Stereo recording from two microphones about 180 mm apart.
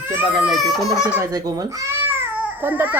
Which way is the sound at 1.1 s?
20° right (ahead or behind).